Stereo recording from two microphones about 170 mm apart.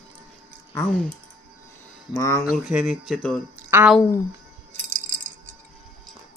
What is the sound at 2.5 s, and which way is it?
Speech, 5° right (ahead or behind).